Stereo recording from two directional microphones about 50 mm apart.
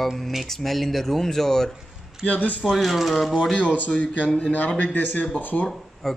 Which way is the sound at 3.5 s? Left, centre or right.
Left.